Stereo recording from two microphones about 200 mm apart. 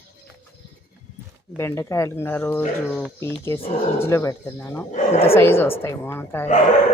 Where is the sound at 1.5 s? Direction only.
15° left (ahead or behind).